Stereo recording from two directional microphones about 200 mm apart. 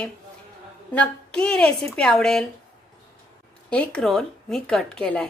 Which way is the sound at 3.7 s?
5° left (ahead or behind).